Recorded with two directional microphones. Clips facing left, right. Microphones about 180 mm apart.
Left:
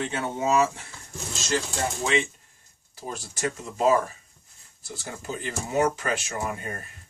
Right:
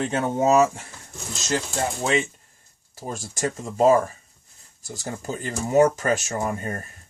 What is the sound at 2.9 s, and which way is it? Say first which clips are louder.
Speech: right 3 dB; 45° right (ahead or behind).